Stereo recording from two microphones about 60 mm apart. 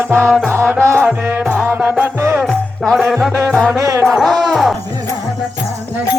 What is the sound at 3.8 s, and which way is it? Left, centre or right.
Music, right.